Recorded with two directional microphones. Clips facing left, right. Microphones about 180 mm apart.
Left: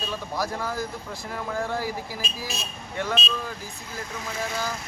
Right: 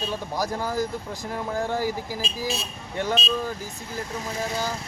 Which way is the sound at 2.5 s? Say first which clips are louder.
Right 3 dB; 35° right (ahead or behind).